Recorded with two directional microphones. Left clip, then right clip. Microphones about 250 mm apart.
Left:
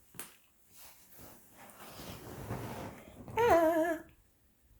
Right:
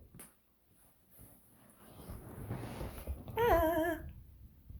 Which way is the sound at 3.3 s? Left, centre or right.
Centre.